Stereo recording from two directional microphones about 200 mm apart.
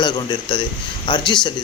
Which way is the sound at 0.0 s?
25° left (ahead or behind).